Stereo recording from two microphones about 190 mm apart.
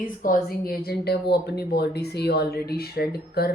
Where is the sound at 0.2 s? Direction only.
45° left (ahead or behind).